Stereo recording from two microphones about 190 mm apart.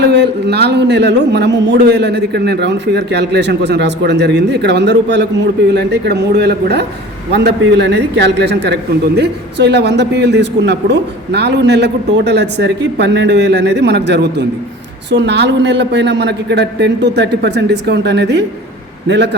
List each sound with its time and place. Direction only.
0.0 s speech: 60° right (ahead or behind)